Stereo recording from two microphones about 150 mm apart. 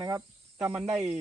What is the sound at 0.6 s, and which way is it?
Cricket, 10° right (ahead or behind).